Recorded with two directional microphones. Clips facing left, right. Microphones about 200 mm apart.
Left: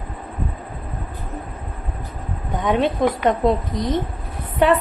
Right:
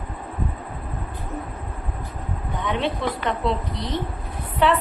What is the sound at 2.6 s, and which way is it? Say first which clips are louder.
A woman's voice: left 7 dB; 45° left (ahead or behind).